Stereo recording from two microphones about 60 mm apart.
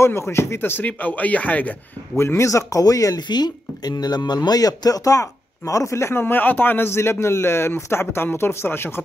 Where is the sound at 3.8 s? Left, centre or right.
Left.